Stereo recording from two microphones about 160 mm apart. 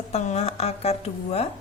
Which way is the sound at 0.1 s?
40° left (ahead or behind).